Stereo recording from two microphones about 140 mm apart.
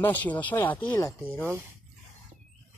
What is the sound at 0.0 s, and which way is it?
Speech, 10° left (ahead or behind).